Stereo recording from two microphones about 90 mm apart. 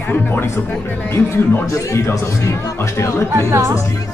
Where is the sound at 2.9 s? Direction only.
30° left (ahead or behind).